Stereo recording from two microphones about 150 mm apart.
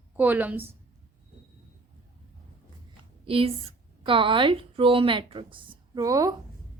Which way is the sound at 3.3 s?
40° right (ahead or behind).